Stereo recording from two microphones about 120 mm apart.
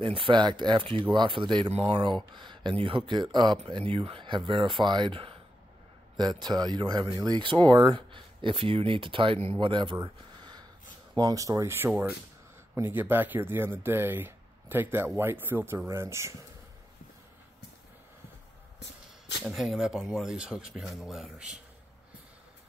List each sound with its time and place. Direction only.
0.0 s speech: 45° right (ahead or behind)
1.7 s speech: 55° right (ahead or behind)
10.0 s a sound: 35° right (ahead or behind)
11.1 s speech: 30° right (ahead or behind)
19.4 s speech: centre (ahead or behind)